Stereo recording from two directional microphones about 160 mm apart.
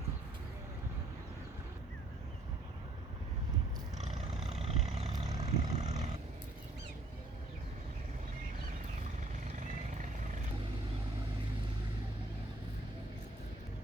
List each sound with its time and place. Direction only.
4.4 s vehicle: 40° right (ahead or behind)